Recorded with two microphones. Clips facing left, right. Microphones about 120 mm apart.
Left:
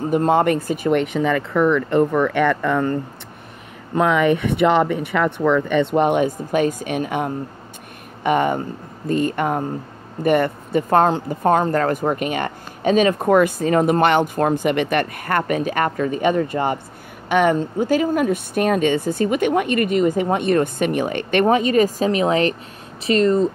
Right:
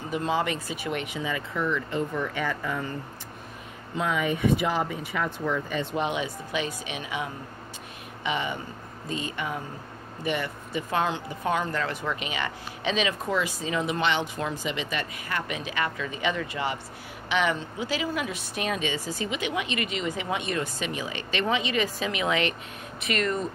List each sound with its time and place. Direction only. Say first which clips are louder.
0.1 s speech: left 10 dB; 50° left (ahead or behind); by 23.5 s 30° left (ahead or behind)